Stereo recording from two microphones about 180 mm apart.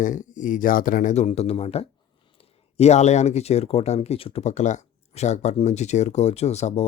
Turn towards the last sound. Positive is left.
turn(degrees=35)  # may be behind; listen again after turning